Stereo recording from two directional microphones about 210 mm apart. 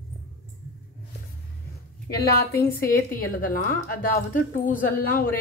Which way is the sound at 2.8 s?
45° left (ahead or behind).